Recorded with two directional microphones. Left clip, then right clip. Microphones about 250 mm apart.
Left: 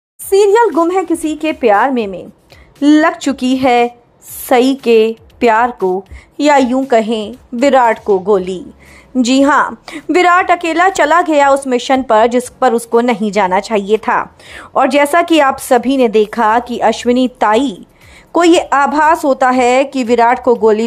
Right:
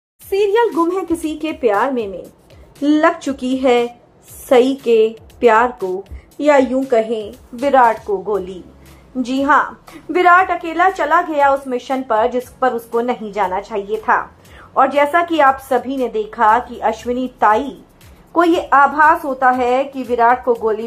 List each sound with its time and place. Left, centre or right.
0.3 s a woman's voice: left